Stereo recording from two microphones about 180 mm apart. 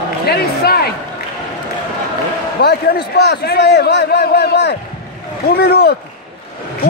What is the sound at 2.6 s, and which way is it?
A man's voice, 60° left (ahead or behind).